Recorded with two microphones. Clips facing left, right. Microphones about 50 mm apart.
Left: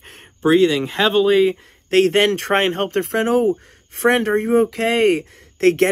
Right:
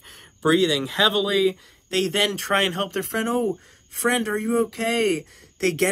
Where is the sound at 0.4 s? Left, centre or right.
Left.